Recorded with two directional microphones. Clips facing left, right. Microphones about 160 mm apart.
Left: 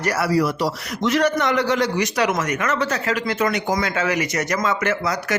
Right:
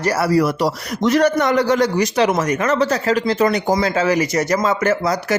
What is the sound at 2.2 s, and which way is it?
Speech, 30° right (ahead or behind).